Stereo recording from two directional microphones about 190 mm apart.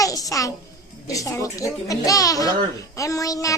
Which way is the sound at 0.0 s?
20° left (ahead or behind).